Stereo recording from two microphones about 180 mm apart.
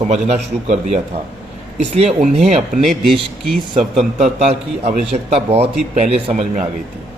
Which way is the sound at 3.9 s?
40° right (ahead or behind).